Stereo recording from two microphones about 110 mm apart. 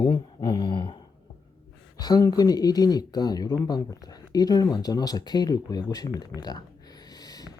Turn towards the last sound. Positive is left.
turn(degrees=35)  # may be behind; listen again after turning